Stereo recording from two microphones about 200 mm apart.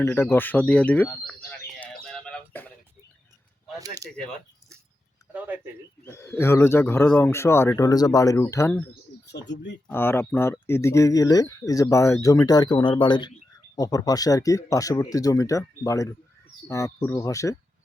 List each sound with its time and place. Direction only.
0.0 s speech: 10° left (ahead or behind)
1.5 s bird: 5° left (ahead or behind)
2.0 s a sound: 5° left (ahead or behind)
3.8 s speech: 15° right (ahead or behind)
6.1 s speech: 10° left (ahead or behind)
9.2 s speech: 60° left (ahead or behind)
9.8 s speech: 10° left (ahead or behind)